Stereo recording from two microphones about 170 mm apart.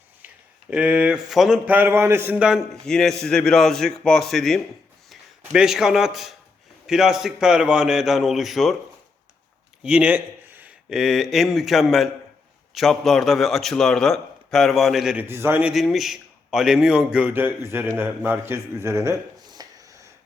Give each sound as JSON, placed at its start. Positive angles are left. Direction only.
{"t": 0.7, "sound": "a man's voice", "side_deg": -10}
{"t": 9.8, "sound": "a man's voice", "side_deg": -5}